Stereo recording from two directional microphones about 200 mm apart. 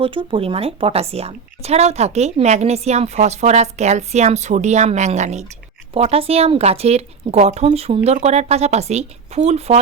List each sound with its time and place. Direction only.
0.0 s a woman's voice: 25° right (ahead or behind)